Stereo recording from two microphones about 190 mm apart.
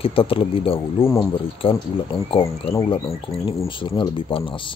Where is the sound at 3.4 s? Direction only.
25° left (ahead or behind).